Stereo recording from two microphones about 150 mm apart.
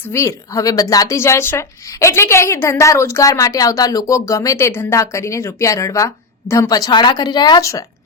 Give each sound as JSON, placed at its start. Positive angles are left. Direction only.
{"t": 0.1, "sound": "speech", "side_deg": 20}